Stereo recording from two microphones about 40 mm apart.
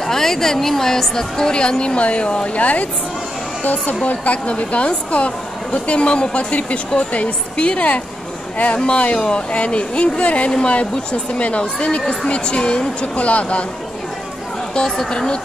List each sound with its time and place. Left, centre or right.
0.0 s a woman's voice: centre; by 10.5 s left
10.5 s a woman's voice: centre
10.8 s speech: left
14.8 s a woman's voice: centre